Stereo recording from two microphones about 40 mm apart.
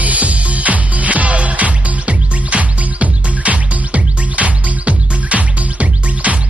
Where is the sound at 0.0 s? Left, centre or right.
Right.